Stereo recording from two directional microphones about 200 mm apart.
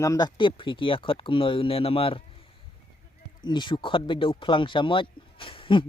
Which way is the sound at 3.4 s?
20° left (ahead or behind).